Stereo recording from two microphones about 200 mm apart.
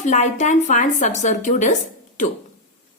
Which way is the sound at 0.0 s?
35° left (ahead or behind).